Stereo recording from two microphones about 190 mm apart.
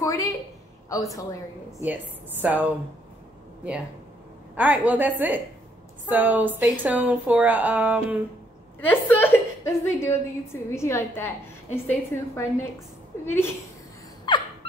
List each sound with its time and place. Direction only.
0.0 s a woman's voice: 15° left (ahead or behind)
1.9 s speech: 10° right (ahead or behind)
4.6 s speech: 10° right (ahead or behind)
8.8 s a woman's voice: 10° left (ahead or behind)
14.3 s a sound: 25° left (ahead or behind)